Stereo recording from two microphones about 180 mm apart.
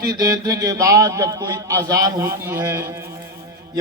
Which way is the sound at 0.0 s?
20° right (ahead or behind).